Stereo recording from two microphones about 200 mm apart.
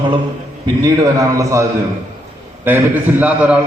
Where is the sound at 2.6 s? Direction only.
10° right (ahead or behind).